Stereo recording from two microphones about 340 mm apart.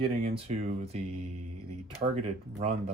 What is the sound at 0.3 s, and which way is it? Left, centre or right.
Speech, centre.